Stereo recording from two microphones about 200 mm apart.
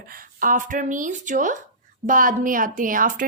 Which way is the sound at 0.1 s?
45° right (ahead or behind).